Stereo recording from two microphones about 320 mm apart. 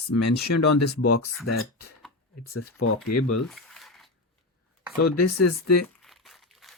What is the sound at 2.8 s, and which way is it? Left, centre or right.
Speech, left.